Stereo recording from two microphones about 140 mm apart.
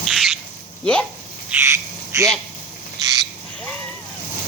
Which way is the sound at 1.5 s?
20° right (ahead or behind).